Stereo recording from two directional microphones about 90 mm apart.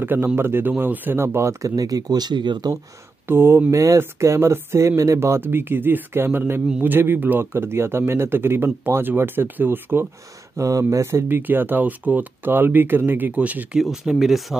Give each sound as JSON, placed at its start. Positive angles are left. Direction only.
{"t": 0.0, "sound": "speech", "side_deg": -25}
{"t": 3.3, "sound": "speech", "side_deg": -25}
{"t": 10.6, "sound": "speech", "side_deg": -35}
{"t": 13.7, "sound": "speech", "side_deg": -5}